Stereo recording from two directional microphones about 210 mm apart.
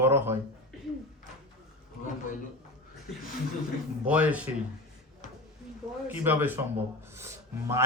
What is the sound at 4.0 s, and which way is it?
Speech, 5° right (ahead or behind).